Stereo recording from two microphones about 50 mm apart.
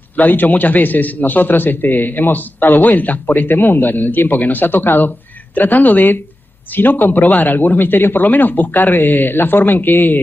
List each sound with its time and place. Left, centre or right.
0.1 s a man's voice: left